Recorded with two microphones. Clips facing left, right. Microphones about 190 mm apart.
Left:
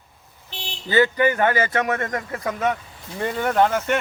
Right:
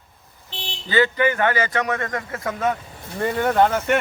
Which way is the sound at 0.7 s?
20° left (ahead or behind).